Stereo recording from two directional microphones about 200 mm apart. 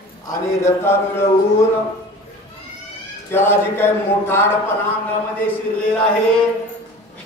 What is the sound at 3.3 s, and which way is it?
Speech, 10° left (ahead or behind).